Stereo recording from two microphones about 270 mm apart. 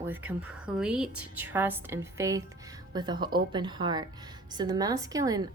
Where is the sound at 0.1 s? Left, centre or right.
Centre.